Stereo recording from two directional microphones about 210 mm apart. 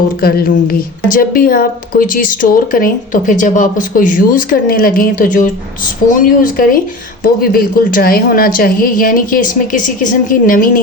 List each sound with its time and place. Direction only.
0.2 s a woman's voice: 45° left (ahead or behind)